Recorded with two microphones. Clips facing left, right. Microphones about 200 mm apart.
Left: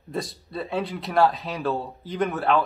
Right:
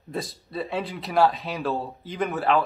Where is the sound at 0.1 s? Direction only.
Centre (ahead or behind).